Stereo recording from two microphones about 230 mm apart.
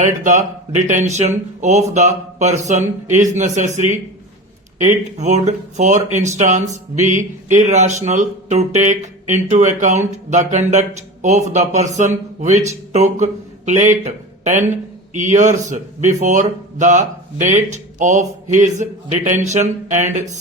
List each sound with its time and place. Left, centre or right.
0.0 s speech: right
5.1 s a man's voice: right